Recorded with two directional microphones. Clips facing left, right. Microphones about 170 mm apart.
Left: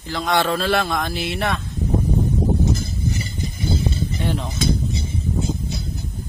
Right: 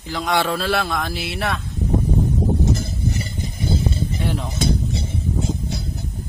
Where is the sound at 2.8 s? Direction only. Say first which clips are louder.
Right 1 dB; 60° right (ahead or behind).